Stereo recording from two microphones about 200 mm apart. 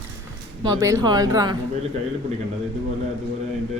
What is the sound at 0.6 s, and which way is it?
Speech, 15° right (ahead or behind).